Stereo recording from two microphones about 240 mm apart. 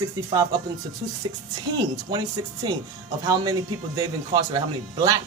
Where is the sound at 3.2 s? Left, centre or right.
Centre.